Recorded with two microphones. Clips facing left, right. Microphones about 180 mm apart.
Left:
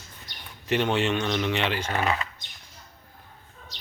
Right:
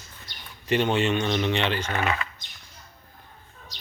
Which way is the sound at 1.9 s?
35° left (ahead or behind).